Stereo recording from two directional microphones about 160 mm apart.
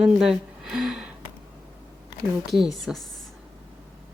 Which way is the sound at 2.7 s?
Centre (ahead or behind).